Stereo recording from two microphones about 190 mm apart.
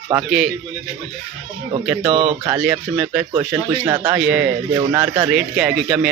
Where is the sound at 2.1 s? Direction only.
30° right (ahead or behind).